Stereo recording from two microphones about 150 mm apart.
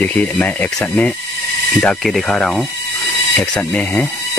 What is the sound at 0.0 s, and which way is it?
Speech, 10° left (ahead or behind).